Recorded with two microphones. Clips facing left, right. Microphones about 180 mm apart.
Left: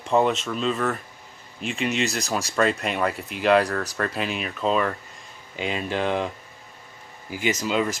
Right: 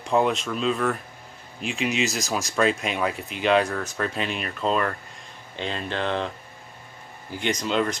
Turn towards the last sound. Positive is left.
turn(degrees=5)  # may be behind; listen again after turning